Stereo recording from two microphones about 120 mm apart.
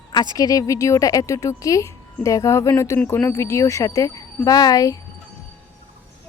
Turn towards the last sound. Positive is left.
turn(degrees=30)  # may be behind; listen again after turning